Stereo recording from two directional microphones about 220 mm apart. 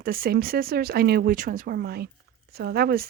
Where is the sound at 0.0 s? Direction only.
40° right (ahead or behind).